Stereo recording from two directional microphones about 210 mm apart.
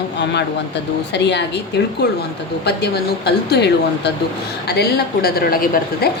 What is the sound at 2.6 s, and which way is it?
A woman's voice, 50° left (ahead or behind).